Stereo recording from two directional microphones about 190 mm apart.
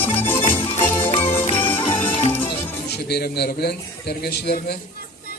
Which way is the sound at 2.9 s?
60° left (ahead or behind).